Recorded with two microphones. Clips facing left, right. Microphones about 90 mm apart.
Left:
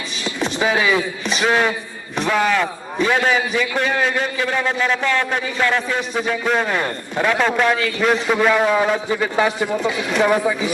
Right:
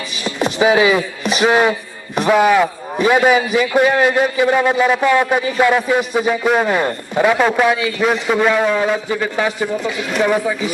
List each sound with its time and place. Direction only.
0.3 s a man's voice: 10° right (ahead or behind)